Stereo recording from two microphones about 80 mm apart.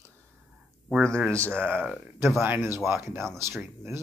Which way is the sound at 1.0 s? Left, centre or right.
Centre.